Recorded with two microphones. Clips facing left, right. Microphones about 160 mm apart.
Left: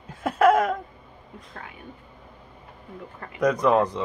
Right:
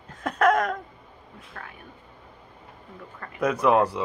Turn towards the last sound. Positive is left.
turn(degrees=-5)  # may be behind; listen again after turning